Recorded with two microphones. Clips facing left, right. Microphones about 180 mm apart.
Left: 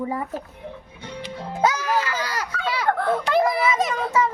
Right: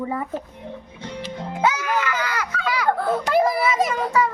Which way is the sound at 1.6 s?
35° left (ahead or behind).